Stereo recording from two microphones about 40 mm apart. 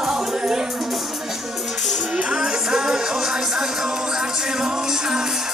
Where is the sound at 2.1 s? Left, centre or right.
Right.